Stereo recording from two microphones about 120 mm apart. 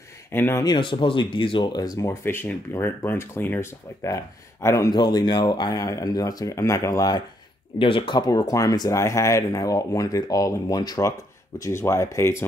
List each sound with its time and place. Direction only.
0.3 s speech: 20° left (ahead or behind)
0.7 s speech: 40° left (ahead or behind)
7.8 s speech: 45° left (ahead or behind); by 12.4 s 25° left (ahead or behind)